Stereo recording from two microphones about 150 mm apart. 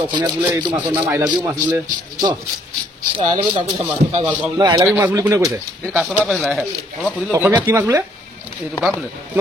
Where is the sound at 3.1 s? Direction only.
35° right (ahead or behind).